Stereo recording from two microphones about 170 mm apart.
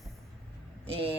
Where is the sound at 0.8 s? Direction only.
35° right (ahead or behind).